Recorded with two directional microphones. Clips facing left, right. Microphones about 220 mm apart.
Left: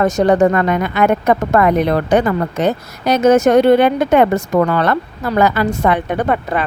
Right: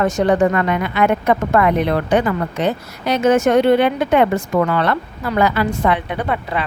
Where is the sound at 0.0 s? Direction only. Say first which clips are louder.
Left 3 dB; 40° left (ahead or behind).